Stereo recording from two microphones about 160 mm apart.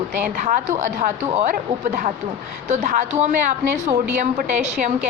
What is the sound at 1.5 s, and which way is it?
A woman's voice, 55° right (ahead or behind).